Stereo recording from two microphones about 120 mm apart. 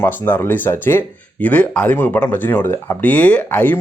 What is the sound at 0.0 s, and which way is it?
Speech, 15° left (ahead or behind).